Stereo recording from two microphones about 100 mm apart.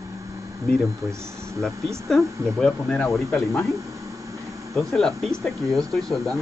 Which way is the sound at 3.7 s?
35° right (ahead or behind).